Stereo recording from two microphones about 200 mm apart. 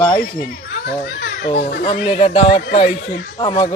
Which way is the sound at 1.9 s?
30° left (ahead or behind).